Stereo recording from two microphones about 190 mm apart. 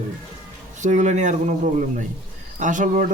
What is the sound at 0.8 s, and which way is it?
Speech, 40° right (ahead or behind).